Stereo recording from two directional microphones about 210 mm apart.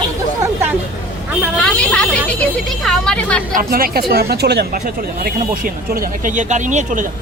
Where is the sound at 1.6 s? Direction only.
5° left (ahead or behind).